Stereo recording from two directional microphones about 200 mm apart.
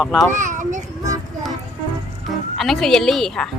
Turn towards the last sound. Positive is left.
turn(degrees=0)  # may be behind; listen again after turning